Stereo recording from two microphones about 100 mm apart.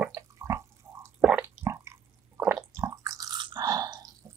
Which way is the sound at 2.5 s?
30° right (ahead or behind).